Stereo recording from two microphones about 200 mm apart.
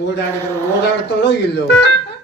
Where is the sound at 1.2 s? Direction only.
60° left (ahead or behind).